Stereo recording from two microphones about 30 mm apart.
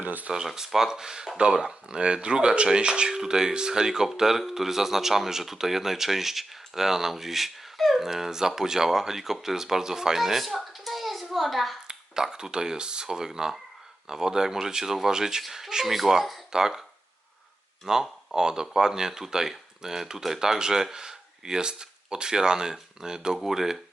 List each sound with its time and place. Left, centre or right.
0.0 s a sound: right
0.4 s speech: centre
1.9 s speech: right
3.1 s speech: centre
11.9 s speech: right
15.4 s speech: centre
17.8 s speech: centre
20.4 s speech: right
23.4 s speech: centre